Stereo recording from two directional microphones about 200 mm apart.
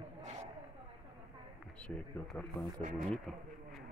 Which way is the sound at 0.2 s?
35° right (ahead or behind).